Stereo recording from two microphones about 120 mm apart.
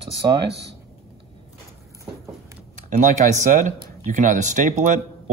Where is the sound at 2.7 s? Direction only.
85° right.